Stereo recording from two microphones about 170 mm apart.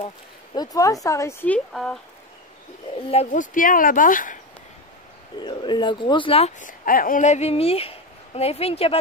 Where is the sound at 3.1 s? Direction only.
45° left (ahead or behind).